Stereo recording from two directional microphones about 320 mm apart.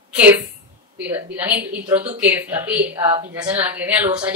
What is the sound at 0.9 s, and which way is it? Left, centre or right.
Speech, centre.